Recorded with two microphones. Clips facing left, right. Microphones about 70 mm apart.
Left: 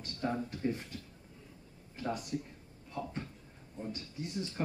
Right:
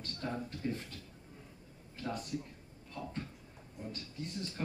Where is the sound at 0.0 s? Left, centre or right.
Centre.